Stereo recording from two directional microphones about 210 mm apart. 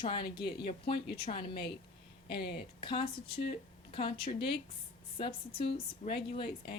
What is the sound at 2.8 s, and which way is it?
A woman's voice, 25° left (ahead or behind).